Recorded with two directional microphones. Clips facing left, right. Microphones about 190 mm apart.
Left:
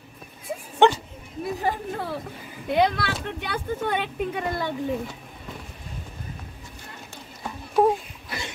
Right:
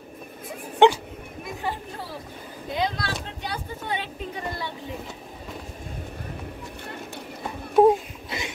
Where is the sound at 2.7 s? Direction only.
60° left (ahead or behind).